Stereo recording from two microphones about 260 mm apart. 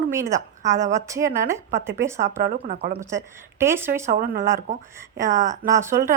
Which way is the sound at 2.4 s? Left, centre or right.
Right.